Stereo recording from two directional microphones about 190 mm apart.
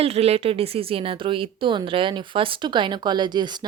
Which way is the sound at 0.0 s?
30° right (ahead or behind).